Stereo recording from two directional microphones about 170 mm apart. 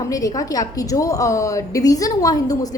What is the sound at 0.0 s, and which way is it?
A woman's voice, 20° left (ahead or behind).